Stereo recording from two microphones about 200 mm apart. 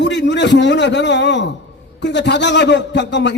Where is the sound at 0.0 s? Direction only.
60° left (ahead or behind).